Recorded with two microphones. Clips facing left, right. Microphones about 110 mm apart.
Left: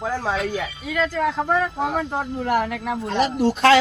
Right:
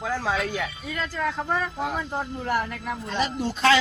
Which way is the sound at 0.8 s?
90° left.